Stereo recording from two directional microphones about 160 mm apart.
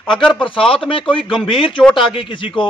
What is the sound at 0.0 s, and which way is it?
Speech, 5° left (ahead or behind).